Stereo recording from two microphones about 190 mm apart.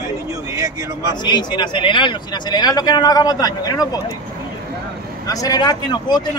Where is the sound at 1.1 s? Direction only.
25° left (ahead or behind).